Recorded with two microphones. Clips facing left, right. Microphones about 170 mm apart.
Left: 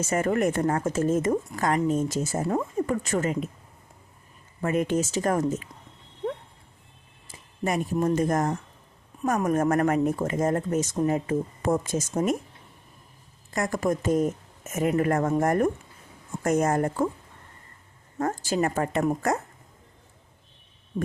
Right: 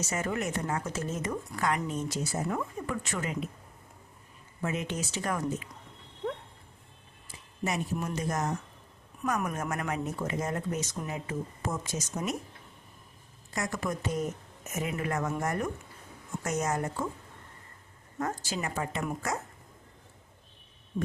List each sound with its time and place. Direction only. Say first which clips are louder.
0.0 s speech: left 8 dB; 50° left (ahead or behind)
2.4 s speech: left 6 dB; 30° left (ahead or behind)
2.7 s speech: left 9 dB; 45° left (ahead or behind)
4.6 s speech: left 9 dB; 55° left (ahead or behind)
7.3 s a sound: left 5 dB; 50° left (ahead or behind)
8.1 s speech: left 8 dB; 50° left (ahead or behind)
13.5 s speech: left 7 dB; 50° left (ahead or behind)
18.2 s speech: left 8 dB; 50° left (ahead or behind)